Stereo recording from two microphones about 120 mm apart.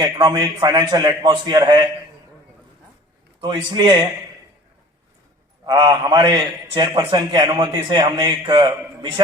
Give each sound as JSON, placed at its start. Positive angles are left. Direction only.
{"t": 0.0, "sound": "a man's voice", "side_deg": -40}
{"t": 3.4, "sound": "a man's voice", "side_deg": -40}
{"t": 5.6, "sound": "a man's voice", "side_deg": -35}